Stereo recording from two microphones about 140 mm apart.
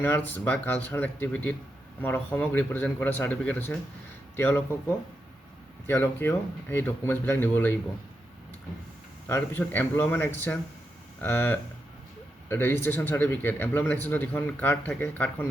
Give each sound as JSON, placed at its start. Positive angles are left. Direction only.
{"t": 0.0, "sound": "a man's voice", "side_deg": 15}
{"t": 9.3, "sound": "a man's voice", "side_deg": 15}